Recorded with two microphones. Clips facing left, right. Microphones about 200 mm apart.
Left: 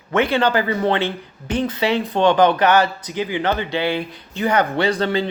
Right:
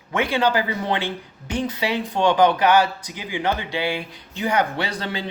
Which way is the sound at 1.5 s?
10° right (ahead or behind).